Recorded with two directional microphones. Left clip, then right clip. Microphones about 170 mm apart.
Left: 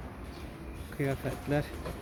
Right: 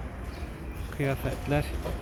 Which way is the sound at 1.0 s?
25° left (ahead or behind).